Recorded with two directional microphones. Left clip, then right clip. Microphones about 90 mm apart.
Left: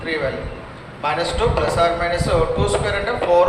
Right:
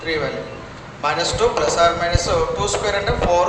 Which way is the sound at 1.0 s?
65° right (ahead or behind).